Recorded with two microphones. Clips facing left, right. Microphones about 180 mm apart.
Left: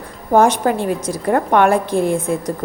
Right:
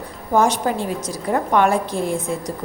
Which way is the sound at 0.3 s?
55° left (ahead or behind).